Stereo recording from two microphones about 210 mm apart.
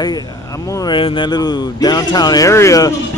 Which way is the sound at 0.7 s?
20° left (ahead or behind).